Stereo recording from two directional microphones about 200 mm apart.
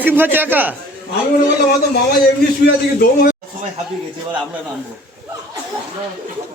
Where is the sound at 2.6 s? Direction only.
45° left (ahead or behind).